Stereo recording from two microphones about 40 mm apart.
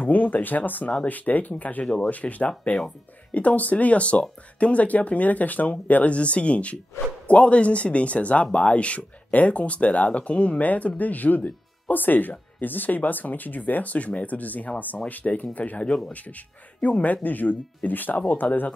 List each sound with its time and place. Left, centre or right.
0.0 s speech: left